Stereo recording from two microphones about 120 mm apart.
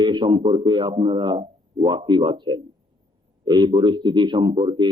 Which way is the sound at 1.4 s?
55° right (ahead or behind).